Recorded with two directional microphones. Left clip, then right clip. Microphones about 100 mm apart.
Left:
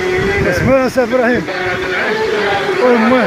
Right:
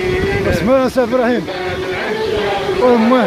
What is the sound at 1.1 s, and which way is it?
Speech, 10° right (ahead or behind).